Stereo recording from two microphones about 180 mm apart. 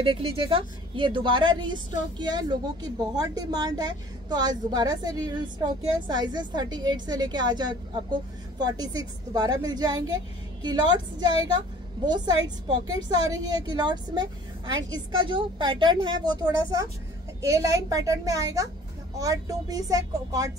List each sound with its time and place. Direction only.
0.0 s a woman's voice: 30° right (ahead or behind)
12.8 s a woman's voice: 20° right (ahead or behind)